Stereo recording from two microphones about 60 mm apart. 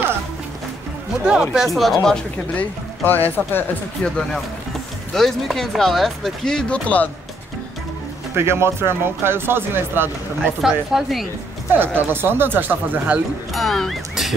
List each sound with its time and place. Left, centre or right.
1.2 s speech: centre
1.8 s speech: centre
2.5 s speech: left
4.0 s speech: centre
6.7 s speech: left
8.4 s speech: right
10.9 s speech: centre
11.7 s speech: right
13.5 s speech: centre